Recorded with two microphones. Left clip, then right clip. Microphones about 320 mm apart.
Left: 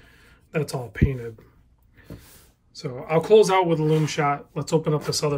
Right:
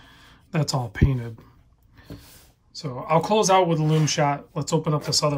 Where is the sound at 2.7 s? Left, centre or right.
Centre.